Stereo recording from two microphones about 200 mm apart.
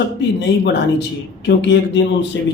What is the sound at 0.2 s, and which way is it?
Speech, 60° left (ahead or behind).